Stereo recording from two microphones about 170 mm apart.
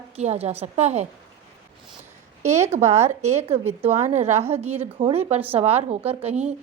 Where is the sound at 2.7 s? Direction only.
40° right (ahead or behind).